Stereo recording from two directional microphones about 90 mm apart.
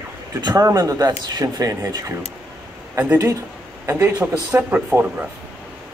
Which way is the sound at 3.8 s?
35° right (ahead or behind).